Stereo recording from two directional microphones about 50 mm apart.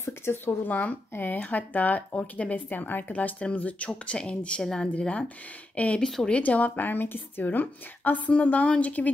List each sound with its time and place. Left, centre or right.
0.0 s speech: left
0.7 s speech: left
2.7 s speech: left
3.3 s a woman's voice: left